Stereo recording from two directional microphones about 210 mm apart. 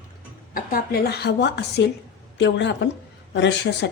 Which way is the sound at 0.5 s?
40° left (ahead or behind).